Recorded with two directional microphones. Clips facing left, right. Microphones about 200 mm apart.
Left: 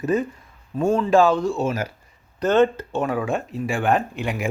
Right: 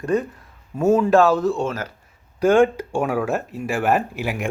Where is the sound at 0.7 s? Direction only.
5° right (ahead or behind).